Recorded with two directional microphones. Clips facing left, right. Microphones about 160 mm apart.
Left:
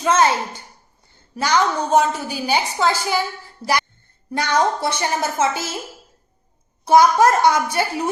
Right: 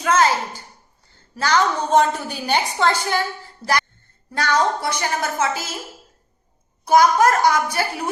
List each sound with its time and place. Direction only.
0.0 s a woman's voice: 25° left (ahead or behind)
1.4 s a woman's voice: 10° left (ahead or behind)
6.8 s a woman's voice: 25° left (ahead or behind)